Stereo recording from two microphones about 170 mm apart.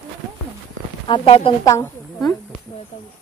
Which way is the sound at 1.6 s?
15° left (ahead or behind).